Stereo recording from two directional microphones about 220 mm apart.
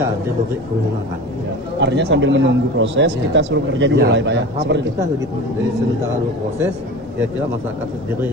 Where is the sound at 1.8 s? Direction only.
55° right (ahead or behind).